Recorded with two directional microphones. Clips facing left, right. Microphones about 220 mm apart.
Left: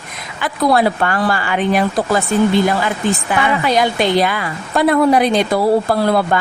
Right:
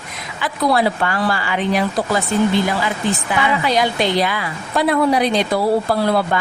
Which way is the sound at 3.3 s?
50° left (ahead or behind).